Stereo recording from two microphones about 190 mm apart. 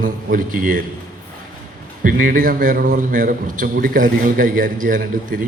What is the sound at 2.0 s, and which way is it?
A man's voice, 45° right (ahead or behind).